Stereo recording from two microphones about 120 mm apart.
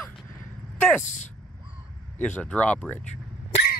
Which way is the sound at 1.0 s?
90° left.